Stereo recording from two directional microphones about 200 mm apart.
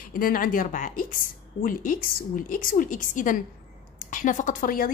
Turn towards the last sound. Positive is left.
turn(degrees=45)  # may be behind; listen again after turning